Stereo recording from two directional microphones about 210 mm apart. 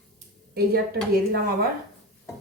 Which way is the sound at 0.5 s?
45° right (ahead or behind).